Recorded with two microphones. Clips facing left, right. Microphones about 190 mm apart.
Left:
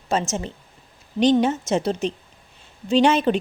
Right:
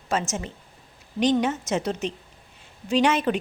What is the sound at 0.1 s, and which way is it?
A woman's voice, 30° left (ahead or behind).